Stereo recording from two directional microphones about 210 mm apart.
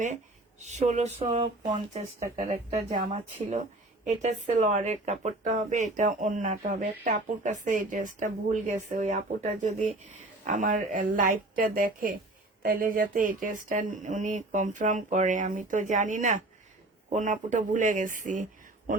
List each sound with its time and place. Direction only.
0.6 s speech: 35° right (ahead or behind)